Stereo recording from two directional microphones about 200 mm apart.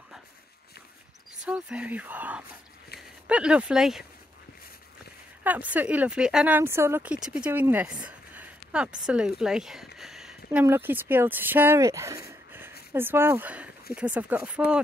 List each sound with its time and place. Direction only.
1.4 s speech: 5° right (ahead or behind)
5.4 s speech: 10° right (ahead or behind)
9.9 s a sound: centre (ahead or behind)
10.6 s speech: 10° right (ahead or behind)